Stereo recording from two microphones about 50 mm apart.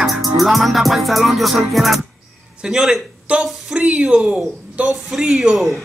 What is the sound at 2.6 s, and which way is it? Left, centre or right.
Speech, centre.